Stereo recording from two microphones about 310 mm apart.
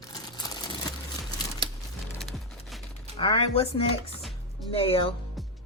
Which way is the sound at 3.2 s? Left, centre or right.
Centre.